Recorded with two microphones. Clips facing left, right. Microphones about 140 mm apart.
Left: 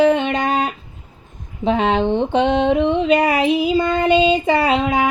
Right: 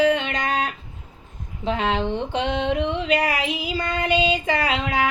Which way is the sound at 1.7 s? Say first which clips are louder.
Left 6 dB; 20° left (ahead or behind).